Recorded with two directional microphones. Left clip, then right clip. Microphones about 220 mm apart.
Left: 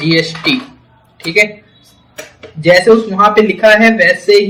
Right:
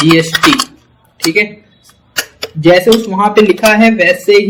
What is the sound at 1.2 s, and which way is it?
Speech, 40° right (ahead or behind).